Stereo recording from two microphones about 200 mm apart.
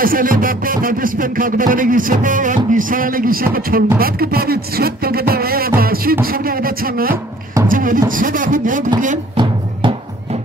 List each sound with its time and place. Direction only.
0.0 s music: 45° right (ahead or behind)
7.6 s beatboxing: 45° right (ahead or behind)
8.2 s speech: 40° right (ahead or behind)
9.4 s music: 25° right (ahead or behind)